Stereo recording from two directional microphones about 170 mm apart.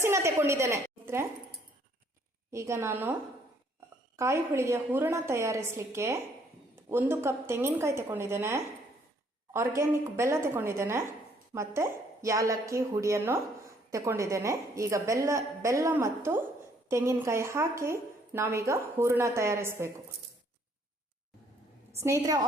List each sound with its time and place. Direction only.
0.0 s a woman's voice: 15° right (ahead or behind)
2.5 s a woman's voice: 15° right (ahead or behind)
4.2 s a woman's voice: 15° right (ahead or behind)
22.0 s a woman's voice: 20° right (ahead or behind)